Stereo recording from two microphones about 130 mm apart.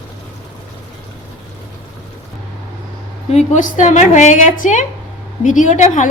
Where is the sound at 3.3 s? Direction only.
60° left (ahead or behind).